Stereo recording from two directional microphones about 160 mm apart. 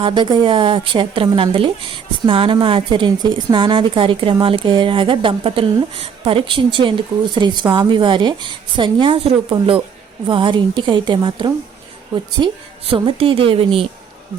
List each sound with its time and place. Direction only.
0.0 s a woman's voice: 30° right (ahead or behind)